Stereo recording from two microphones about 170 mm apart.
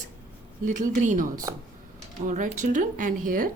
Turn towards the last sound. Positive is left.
turn(degrees=-55)  # may be behind; listen again after turning